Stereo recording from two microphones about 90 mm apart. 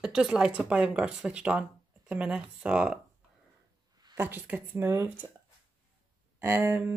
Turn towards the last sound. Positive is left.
turn(degrees=-25)  # may be behind; listen again after turning